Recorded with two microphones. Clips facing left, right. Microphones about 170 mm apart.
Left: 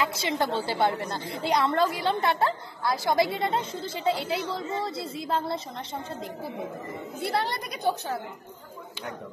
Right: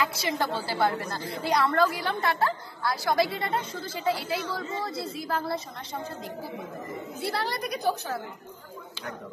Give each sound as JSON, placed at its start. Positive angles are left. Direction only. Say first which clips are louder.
{"t": 0.0, "sound": "a woman's voice", "louder": "left 1 dB", "side_deg": 20}
{"t": 7.2, "sound": "a woman's voice", "louder": "left 2 dB", "side_deg": 25}